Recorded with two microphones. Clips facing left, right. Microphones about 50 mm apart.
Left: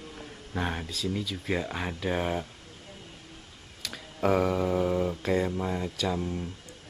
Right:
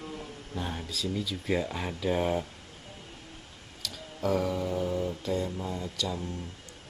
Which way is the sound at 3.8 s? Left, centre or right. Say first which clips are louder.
Left 4 dB; left.